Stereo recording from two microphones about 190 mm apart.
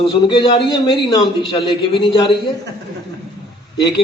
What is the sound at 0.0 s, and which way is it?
A man's voice, 25° left (ahead or behind).